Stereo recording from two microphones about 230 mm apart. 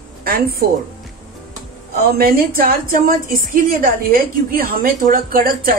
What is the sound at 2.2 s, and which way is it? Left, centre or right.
A woman's voice, right.